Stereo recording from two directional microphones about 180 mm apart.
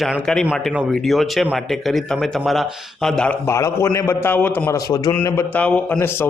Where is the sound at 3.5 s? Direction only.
15° left (ahead or behind).